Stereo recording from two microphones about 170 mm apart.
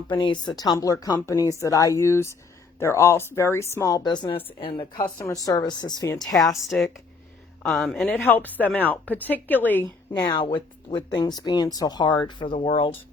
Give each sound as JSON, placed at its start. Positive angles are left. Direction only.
{"t": 0.1, "sound": "speech", "side_deg": 30}
{"t": 7.6, "sound": "speech", "side_deg": 0}
{"t": 10.2, "sound": "speech", "side_deg": 25}